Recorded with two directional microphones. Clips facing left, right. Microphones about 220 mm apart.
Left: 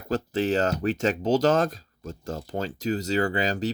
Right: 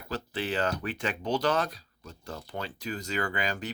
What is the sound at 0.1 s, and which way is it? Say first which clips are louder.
Speech: left 8 dB; 45° left (ahead or behind).